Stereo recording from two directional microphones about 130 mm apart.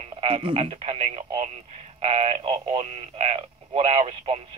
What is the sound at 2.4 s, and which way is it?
Speech, 40° right (ahead or behind).